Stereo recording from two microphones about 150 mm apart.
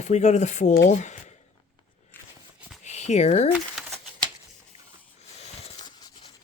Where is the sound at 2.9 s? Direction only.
50° left (ahead or behind).